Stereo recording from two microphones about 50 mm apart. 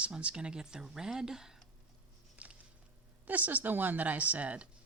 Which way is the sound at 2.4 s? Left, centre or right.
Right.